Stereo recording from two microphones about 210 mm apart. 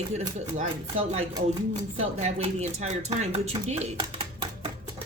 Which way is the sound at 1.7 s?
30° right (ahead or behind).